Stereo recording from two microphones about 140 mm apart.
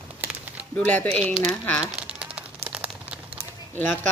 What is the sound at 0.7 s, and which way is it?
Speech, 10° left (ahead or behind).